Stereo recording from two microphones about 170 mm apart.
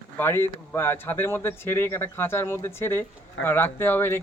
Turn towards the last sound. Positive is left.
turn(degrees=15)  # may be behind; listen again after turning